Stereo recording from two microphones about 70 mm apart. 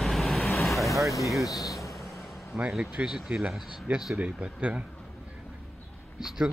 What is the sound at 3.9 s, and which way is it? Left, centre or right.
Speech, right.